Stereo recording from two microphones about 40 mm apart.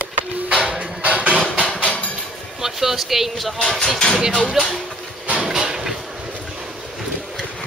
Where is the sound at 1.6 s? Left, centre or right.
Left.